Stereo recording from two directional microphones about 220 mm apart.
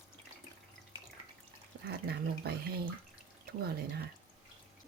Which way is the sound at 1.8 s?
45° right (ahead or behind).